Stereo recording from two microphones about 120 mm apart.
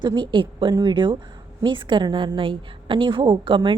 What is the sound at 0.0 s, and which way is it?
A woman's voice, 40° right (ahead or behind).